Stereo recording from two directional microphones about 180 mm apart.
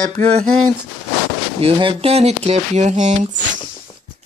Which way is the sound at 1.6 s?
30° right (ahead or behind).